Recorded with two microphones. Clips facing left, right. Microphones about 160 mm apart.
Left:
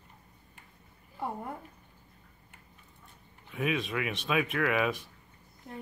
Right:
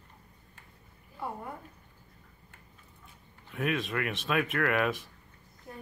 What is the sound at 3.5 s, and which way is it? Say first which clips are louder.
Speech: even; centre (ahead or behind).